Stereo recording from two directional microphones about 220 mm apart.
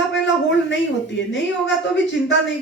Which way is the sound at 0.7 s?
55° left (ahead or behind).